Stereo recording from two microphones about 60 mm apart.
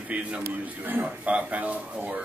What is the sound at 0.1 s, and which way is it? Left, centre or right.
A man's voice, right.